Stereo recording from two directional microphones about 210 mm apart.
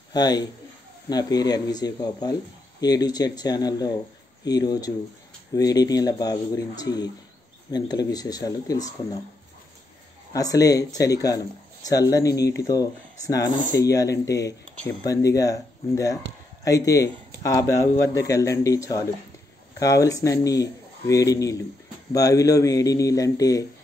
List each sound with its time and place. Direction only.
0.1 s speech: 20° left (ahead or behind)
10.3 s speech: 15° left (ahead or behind)
13.7 s speech: 15° left (ahead or behind)